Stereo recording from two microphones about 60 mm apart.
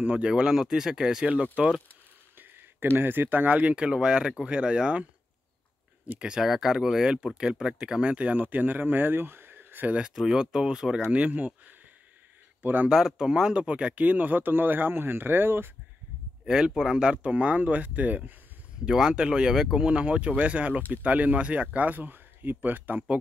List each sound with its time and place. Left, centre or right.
0.0 s speech: centre
2.3 s speech: right; by 5.0 s centre
6.1 s speech: centre; by 9.9 s right
9.9 s speech: centre
12.9 s speech: centre; by 15.7 s right
16.4 s speech: centre
18.9 s speech: centre; by 22.9 s right